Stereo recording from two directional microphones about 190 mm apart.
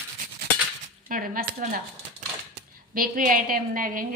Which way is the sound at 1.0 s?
45° right (ahead or behind).